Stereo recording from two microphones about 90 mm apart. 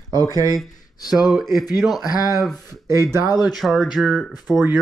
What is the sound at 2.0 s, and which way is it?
Speech, 45° left (ahead or behind).